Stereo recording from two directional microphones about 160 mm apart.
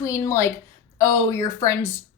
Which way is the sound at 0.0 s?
20° left (ahead or behind).